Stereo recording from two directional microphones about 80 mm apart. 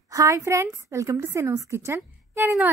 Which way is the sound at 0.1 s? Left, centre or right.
Right.